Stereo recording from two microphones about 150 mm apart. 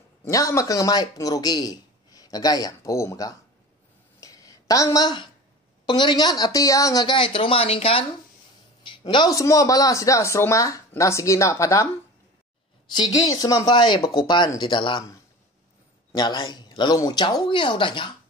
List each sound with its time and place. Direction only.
0.2 s a man's voice: 20° left (ahead or behind)
4.2 s a sound: 20° left (ahead or behind)
5.9 s a man's voice: 30° left (ahead or behind)
12.9 s speech: 25° left (ahead or behind)
16.1 s speech: 30° left (ahead or behind)